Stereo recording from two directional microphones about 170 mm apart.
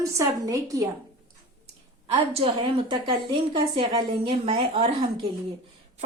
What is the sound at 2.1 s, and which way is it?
A woman's voice, 30° right (ahead or behind).